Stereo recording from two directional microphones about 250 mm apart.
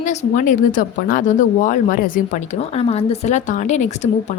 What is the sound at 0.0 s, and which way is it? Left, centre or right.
A woman's voice, left.